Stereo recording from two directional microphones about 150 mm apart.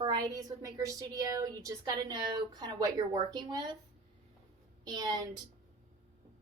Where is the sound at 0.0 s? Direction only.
25° right (ahead or behind).